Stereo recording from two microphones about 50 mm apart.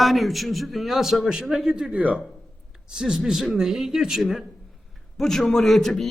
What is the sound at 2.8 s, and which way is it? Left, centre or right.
A man's voice, centre.